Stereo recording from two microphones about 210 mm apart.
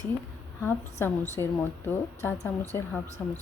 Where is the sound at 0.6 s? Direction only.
10° left (ahead or behind).